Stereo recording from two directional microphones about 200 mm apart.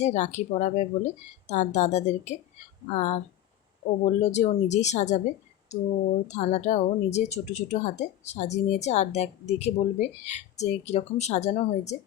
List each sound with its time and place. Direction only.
0.0 s speech: 35° left (ahead or behind)
4.2 s speech: 35° left (ahead or behind)